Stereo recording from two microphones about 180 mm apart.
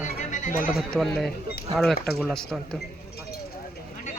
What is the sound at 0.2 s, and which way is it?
Music, 45° left (ahead or behind).